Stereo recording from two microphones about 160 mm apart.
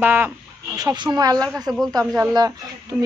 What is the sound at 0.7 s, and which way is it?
Speech, 25° right (ahead or behind).